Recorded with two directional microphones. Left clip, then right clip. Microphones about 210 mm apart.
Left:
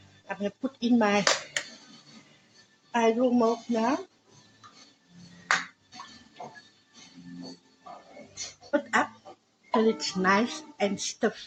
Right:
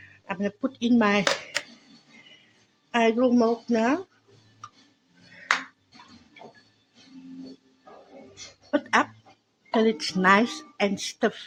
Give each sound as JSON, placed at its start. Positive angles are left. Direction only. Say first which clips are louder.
{"t": 0.3, "sound": "speech", "louder": "right 3 dB", "side_deg": -30}
{"t": 2.9, "sound": "a woman's voice", "louder": "right 2 dB", "side_deg": -35}
{"t": 8.7, "sound": "a sound", "louder": "right 3 dB", "side_deg": -20}
{"t": 9.7, "sound": "speech", "louder": "right 2 dB", "side_deg": -25}